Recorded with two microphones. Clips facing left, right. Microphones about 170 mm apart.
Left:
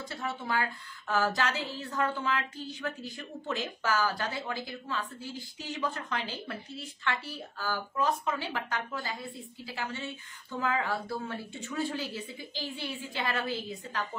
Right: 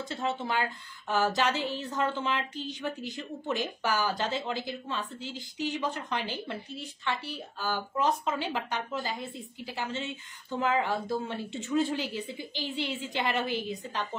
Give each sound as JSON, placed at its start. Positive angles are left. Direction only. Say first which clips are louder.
{"t": 0.1, "sound": "a woman's voice", "louder": "right 2 dB", "side_deg": -20}